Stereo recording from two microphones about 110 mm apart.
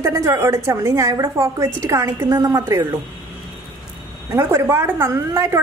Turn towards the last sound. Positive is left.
turn(degrees=-20)  # may be behind; listen again after turning